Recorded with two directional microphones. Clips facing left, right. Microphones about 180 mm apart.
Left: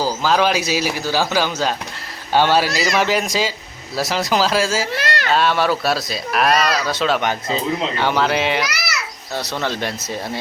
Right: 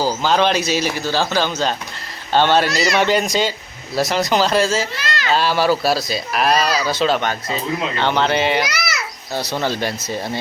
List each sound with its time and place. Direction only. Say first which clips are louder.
0.0 s speech: right 1 dB; centre (ahead or behind)
4.9 s a sound: left 3 dB; 60° left (ahead or behind)
5.3 s speech: right 1 dB; centre (ahead or behind)